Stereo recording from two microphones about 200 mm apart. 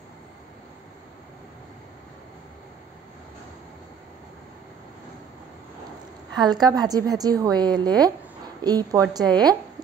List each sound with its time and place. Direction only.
6.3 s a woman's voice: 20° right (ahead or behind)